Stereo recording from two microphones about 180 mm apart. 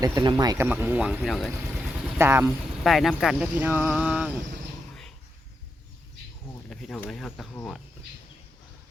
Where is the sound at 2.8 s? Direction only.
Centre (ahead or behind).